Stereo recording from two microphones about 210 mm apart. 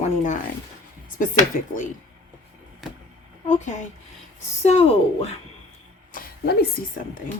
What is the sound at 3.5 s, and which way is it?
Speech, 35° left (ahead or behind).